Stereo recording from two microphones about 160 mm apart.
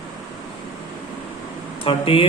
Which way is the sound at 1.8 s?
35° left (ahead or behind).